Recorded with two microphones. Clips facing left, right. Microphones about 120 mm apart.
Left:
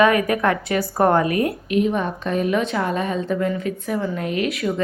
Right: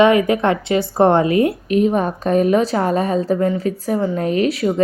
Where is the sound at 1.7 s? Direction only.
40° right (ahead or behind).